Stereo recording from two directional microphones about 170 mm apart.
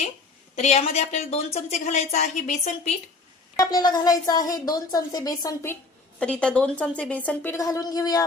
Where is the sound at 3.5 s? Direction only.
20° left (ahead or behind).